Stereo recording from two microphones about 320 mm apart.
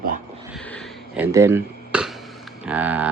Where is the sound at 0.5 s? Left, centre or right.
Centre.